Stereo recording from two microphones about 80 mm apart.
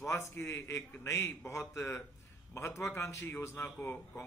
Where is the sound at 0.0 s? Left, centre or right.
Left.